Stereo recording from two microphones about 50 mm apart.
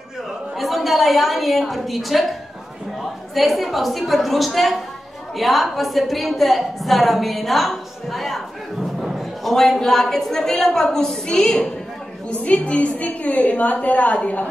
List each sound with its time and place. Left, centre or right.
0.6 s a woman's voice: centre
9.0 s a sound: centre
9.5 s a woman's voice: centre
12.3 s a woman's voice: left